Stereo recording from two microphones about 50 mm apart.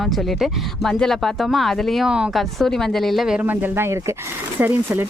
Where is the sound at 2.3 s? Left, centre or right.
Centre.